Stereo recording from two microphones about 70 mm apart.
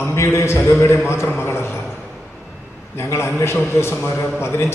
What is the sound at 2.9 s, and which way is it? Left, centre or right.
Speech, left.